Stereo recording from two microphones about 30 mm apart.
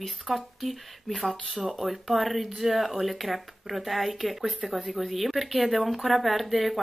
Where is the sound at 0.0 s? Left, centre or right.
Centre.